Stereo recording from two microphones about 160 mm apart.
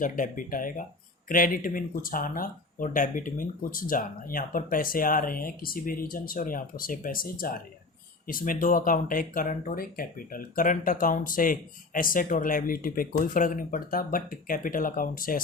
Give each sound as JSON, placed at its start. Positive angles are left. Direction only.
{"t": 0.0, "sound": "speech", "side_deg": 55}